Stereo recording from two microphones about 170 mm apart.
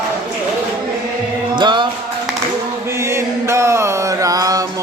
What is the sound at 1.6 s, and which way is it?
Music, 25° right (ahead or behind).